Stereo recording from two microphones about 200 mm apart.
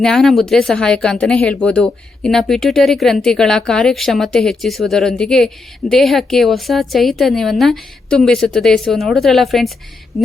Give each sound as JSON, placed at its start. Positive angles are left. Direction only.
{"t": 0.0, "sound": "speech", "side_deg": 0}